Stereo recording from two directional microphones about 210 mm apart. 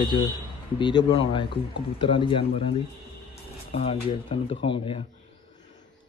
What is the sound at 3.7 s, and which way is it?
Speech, 25° left (ahead or behind).